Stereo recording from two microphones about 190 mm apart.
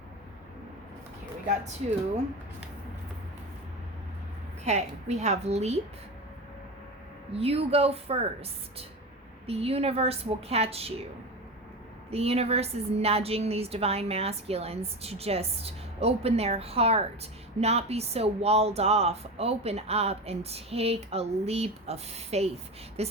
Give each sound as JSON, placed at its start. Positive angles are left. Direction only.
{"t": 4.6, "sound": "speech", "side_deg": -35}
{"t": 7.3, "sound": "speech", "side_deg": -30}
{"t": 9.5, "sound": "speech", "side_deg": -30}
{"t": 12.1, "sound": "speech", "side_deg": -30}